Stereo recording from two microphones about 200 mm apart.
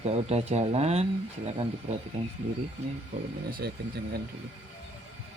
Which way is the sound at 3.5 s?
50° right (ahead or behind).